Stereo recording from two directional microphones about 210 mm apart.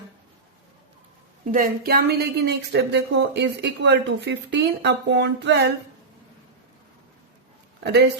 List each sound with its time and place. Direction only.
1.5 s a woman's voice: 40° right (ahead or behind)